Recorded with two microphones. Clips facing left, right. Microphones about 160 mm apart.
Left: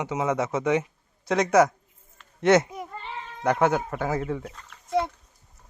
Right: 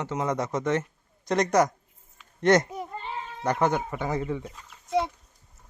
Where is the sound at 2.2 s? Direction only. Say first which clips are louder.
Left 1 dB; 5° left (ahead or behind).